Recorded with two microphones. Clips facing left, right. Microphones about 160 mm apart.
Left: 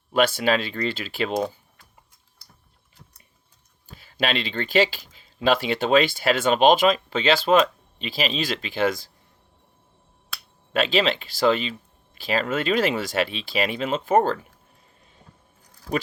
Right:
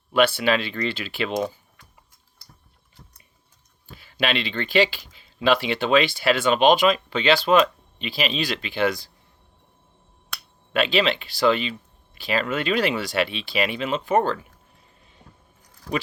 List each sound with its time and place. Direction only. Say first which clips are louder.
0.1 s speech: right 1 dB; 45° left (ahead or behind)
3.8 s speech: even; 40° left (ahead or behind)
10.7 s speech: even; 40° left (ahead or behind)